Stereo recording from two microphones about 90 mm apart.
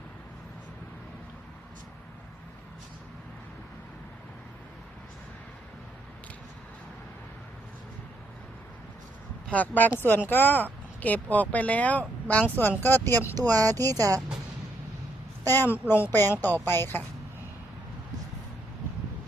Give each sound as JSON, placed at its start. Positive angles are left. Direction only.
{"t": 9.5, "sound": "a child's voice", "side_deg": 15}
{"t": 13.3, "sound": "speech", "side_deg": -45}
{"t": 15.4, "sound": "a child's voice", "side_deg": 25}